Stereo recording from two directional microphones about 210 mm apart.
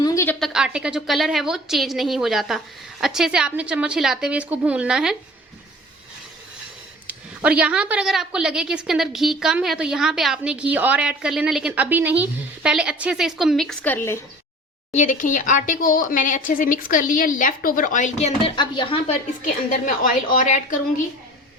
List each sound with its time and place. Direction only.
0.0 s a sound: 15° left (ahead or behind)
0.3 s a woman's voice: centre (ahead or behind)
7.1 s a woman's voice: 5° right (ahead or behind); by 14.2 s 10° left (ahead or behind)
14.9 s speech: 35° left (ahead or behind)
19.4 s speech: 40° left (ahead or behind)